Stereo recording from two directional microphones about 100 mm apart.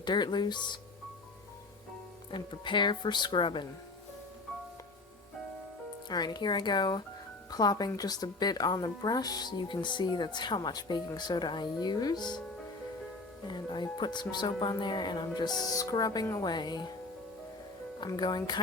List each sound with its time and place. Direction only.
0.0 s speech: 45° left (ahead or behind)
2.3 s speech: 55° left (ahead or behind)
6.1 s speech: 45° left (ahead or behind)
13.5 s speech: 50° left (ahead or behind)
18.2 s speech: 45° left (ahead or behind)